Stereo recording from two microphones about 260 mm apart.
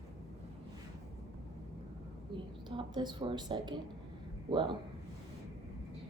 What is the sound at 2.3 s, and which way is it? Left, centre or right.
A woman's voice, centre.